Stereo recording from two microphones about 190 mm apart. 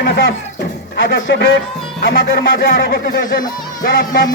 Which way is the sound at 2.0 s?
60° left (ahead or behind).